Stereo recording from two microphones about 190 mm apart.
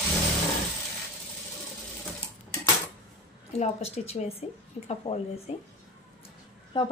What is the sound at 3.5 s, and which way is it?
A woman's voice, 35° left (ahead or behind).